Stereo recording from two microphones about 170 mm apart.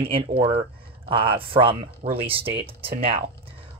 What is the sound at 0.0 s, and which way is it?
Speech, 35° right (ahead or behind).